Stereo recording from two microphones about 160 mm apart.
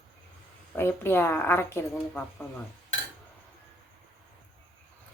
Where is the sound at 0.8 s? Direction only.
15° left (ahead or behind).